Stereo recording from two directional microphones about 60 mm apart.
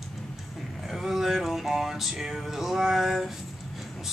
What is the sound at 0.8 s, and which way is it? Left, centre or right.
Music, centre.